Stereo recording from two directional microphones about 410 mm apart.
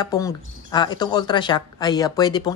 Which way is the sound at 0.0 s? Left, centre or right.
Centre.